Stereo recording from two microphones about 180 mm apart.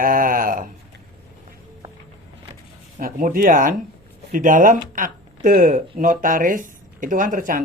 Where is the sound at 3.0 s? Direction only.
50° right (ahead or behind).